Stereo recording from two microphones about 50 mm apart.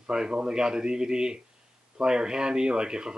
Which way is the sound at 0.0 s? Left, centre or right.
Centre.